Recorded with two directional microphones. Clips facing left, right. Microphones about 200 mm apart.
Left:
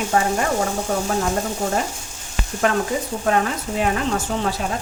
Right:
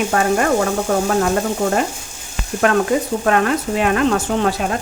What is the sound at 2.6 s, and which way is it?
Speech, 75° right (ahead or behind).